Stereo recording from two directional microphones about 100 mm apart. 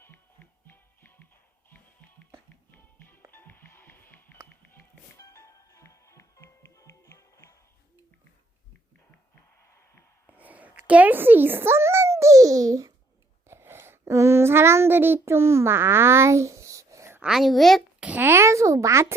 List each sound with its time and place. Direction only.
0.0 s music: 20° left (ahead or behind)
3.3 s music: 20° left (ahead or behind)
5.2 s music: 30° left (ahead or behind)
10.2 s a sound: 15° right (ahead or behind); by 12.9 s 35° right (ahead or behind)
13.5 s a sound: 25° right (ahead or behind)
17.2 s a woman's voice: 5° right (ahead or behind)
18.0 s a child's voice: 20° right (ahead or behind)